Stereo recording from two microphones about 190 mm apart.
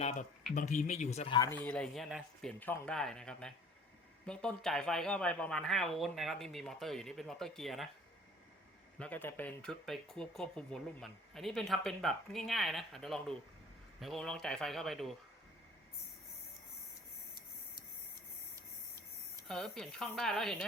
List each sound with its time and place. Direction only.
0.0 s speech: 35° left (ahead or behind)
1.5 s speech: 5° left (ahead or behind)
9.0 s speech: 10° left (ahead or behind)
19.5 s speech: centre (ahead or behind)